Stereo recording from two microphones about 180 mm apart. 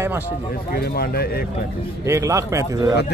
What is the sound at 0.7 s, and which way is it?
Speech, 60° left (ahead or behind).